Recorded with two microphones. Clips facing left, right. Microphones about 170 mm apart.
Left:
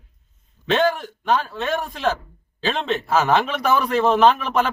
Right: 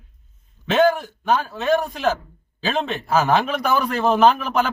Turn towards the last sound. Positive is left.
turn(degrees=0)  # may be behind; listen again after turning